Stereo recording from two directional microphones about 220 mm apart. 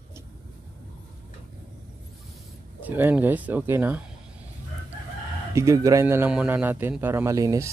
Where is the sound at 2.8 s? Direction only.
10° right (ahead or behind).